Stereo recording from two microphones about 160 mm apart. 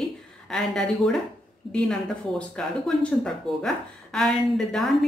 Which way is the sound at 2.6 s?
Centre (ahead or behind).